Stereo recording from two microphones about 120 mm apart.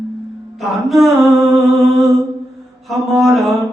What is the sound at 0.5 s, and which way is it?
Music, centre (ahead or behind).